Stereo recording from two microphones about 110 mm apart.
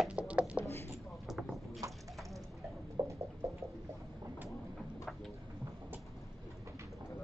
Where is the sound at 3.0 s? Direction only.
30° right (ahead or behind).